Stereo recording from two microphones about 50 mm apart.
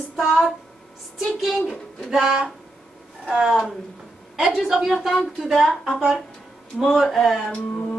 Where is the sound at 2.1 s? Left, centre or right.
Centre.